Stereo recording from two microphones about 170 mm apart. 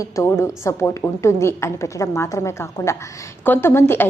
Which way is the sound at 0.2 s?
15° left (ahead or behind).